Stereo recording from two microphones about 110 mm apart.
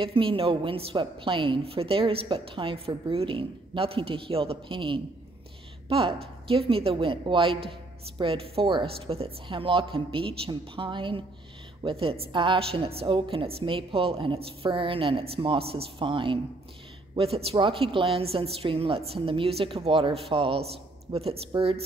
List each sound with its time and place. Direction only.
0.0 s a woman's voice: 55° right (ahead or behind)